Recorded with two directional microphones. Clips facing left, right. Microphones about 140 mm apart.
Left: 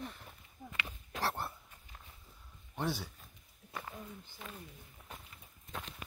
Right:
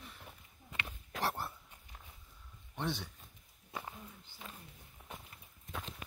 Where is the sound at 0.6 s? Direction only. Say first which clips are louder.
Left 5 dB; 75° left (ahead or behind).